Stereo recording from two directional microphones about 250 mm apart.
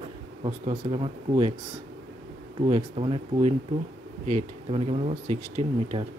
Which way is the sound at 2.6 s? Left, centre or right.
Right.